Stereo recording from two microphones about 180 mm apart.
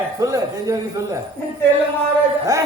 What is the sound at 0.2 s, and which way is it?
Speech, 15° right (ahead or behind).